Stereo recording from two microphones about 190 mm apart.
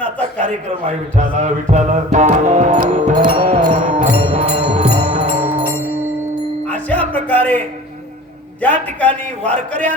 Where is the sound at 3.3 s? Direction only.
35° right (ahead or behind).